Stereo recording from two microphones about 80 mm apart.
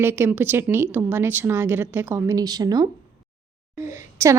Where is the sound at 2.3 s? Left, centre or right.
Right.